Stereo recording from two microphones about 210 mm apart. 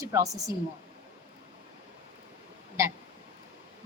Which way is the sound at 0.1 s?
15° right (ahead or behind).